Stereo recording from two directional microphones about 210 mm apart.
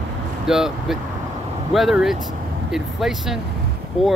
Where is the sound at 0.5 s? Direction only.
Centre (ahead or behind).